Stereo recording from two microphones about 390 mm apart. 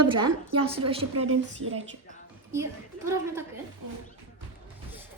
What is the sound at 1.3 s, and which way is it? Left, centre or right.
Speech, right.